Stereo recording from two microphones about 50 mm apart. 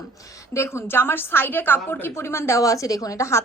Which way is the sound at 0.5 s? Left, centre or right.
Left.